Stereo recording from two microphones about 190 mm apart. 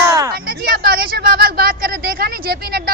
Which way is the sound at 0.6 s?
50° right (ahead or behind).